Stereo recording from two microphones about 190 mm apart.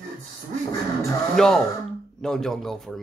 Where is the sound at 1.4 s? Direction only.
Centre (ahead or behind).